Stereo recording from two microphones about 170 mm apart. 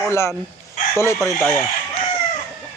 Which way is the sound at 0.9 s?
15° left (ahead or behind).